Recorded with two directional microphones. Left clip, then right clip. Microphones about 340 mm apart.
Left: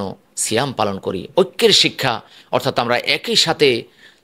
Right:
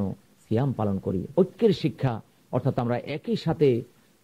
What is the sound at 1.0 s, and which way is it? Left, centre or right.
Speech, centre.